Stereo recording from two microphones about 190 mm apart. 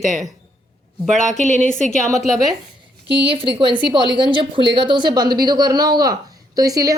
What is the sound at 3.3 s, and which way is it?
Speech, 30° right (ahead or behind).